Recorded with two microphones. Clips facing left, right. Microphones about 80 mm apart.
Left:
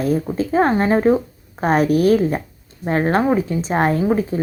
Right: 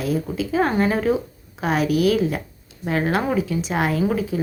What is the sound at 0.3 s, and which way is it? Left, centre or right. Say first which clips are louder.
Speech: left 3 dB; left.